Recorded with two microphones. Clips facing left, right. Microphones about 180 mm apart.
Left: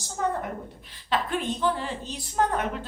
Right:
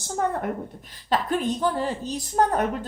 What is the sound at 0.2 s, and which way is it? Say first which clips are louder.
Speech: right 2 dB; 55° right (ahead or behind).